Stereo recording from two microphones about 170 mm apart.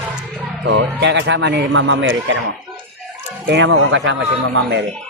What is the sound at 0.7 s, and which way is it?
A man's voice, 90° right.